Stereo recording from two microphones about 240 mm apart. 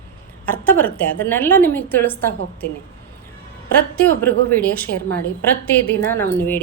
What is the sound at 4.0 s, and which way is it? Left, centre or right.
A woman's voice, centre.